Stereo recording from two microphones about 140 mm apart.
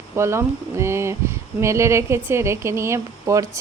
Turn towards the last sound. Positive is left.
turn(degrees=-20)  # may be behind; listen again after turning